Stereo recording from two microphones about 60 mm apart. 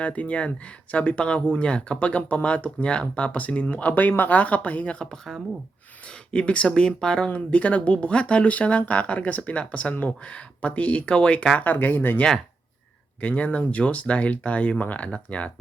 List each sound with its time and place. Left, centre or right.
0.0 s speech: left
5.1 s speech: centre
6.3 s speech: centre
11.6 s speech: left
13.2 s speech: left